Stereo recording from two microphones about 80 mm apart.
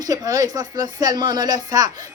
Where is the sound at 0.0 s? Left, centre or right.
Right.